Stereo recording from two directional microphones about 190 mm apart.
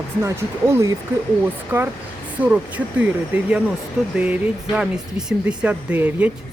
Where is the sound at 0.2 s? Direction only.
15° right (ahead or behind).